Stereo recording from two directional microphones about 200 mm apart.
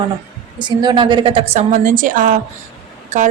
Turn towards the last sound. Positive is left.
turn(degrees=-35)  # may be behind; listen again after turning